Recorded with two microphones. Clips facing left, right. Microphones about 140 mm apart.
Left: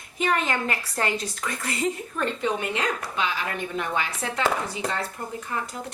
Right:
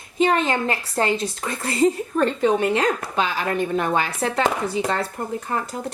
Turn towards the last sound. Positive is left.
turn(degrees=-45)  # may be behind; listen again after turning